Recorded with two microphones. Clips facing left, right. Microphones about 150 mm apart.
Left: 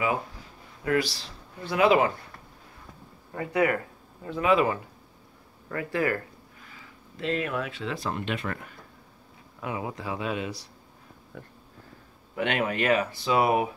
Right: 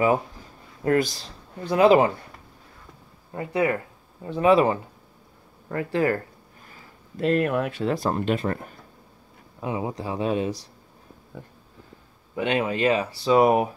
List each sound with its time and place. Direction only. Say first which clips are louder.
0.8 s speech: right 4 dB; 45° right (ahead or behind)
1.7 s speech: right 5 dB; 35° right (ahead or behind)
3.3 s speech: right 1 dB; 25° right (ahead or behind)
6.6 s speech: right 2 dB; 45° right (ahead or behind)
12.4 s speech: right 3 dB; 25° right (ahead or behind)